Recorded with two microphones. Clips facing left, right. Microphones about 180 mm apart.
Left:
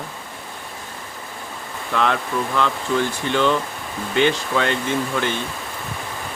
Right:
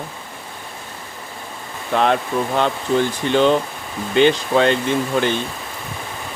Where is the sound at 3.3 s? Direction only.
25° right (ahead or behind).